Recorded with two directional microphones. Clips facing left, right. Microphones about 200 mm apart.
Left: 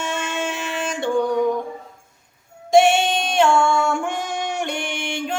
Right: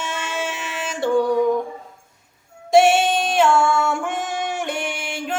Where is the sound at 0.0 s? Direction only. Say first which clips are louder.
Left 2 dB; 5° right (ahead or behind).